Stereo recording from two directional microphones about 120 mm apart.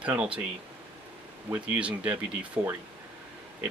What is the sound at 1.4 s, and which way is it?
Speech, 15° right (ahead or behind).